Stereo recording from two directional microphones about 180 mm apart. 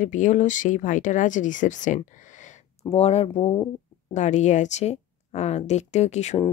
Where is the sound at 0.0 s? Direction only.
45° left (ahead or behind).